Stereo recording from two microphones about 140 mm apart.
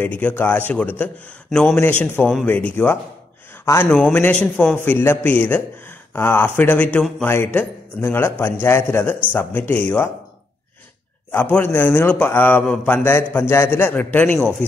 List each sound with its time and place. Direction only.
0.0 s a man's voice: 10° left (ahead or behind)
11.3 s a man's voice: 15° left (ahead or behind)